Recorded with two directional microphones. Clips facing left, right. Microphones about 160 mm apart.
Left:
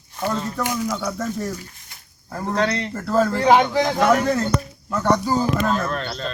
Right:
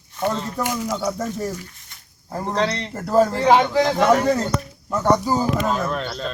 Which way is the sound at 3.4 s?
10° left (ahead or behind).